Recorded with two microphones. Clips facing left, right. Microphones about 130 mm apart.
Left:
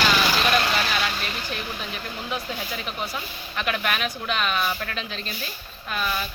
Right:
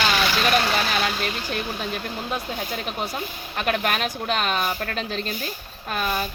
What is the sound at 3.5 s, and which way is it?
Speech, 45° right (ahead or behind).